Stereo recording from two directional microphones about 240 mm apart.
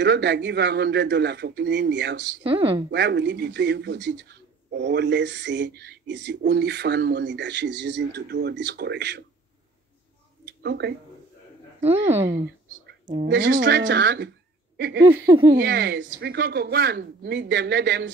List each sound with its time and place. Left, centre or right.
0.0 s speech: right
2.4 s speech: right
2.9 s speech: right
10.4 s a sound: right
13.6 s speech: right
14.8 s a sound: right
15.2 s speech: centre
15.6 s speech: right